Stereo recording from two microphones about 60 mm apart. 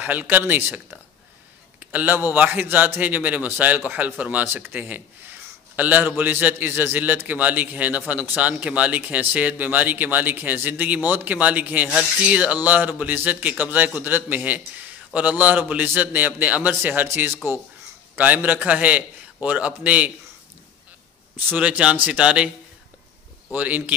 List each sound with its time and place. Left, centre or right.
0.0 s speech: right
1.8 s a sound: right
2.3 s a man's voice: right
18.1 s a man's voice: right
21.5 s a man's voice: centre
23.5 s a man's voice: right